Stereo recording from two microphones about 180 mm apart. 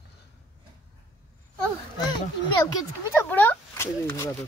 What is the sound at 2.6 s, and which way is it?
Speech, 15° left (ahead or behind).